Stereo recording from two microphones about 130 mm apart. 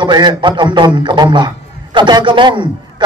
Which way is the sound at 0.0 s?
35° right (ahead or behind).